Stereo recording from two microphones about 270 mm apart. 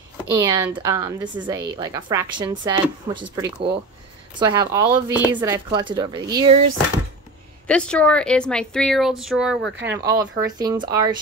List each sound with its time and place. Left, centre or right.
0.3 s speech: centre
7.6 s speech: centre
9.7 s speech: right
10.1 s speech: centre